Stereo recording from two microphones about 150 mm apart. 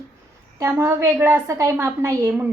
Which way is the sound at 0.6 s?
20° right (ahead or behind).